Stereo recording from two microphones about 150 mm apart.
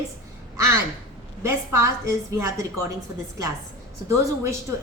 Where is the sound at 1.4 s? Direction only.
20° right (ahead or behind).